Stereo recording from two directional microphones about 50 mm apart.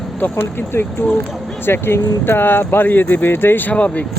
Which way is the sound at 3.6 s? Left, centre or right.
Left.